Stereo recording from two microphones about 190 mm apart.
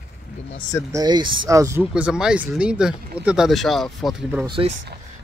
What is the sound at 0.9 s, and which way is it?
Speech, 20° right (ahead or behind).